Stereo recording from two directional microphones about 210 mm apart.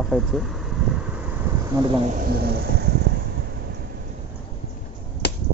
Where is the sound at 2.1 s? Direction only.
50° right (ahead or behind).